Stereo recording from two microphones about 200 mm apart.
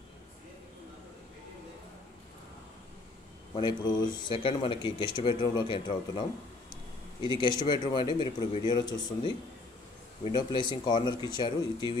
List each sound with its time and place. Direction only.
3.5 s speech: 20° left (ahead or behind)
7.2 s speech: 25° left (ahead or behind)